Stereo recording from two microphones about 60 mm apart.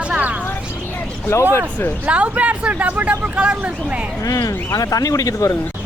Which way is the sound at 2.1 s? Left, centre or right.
Right.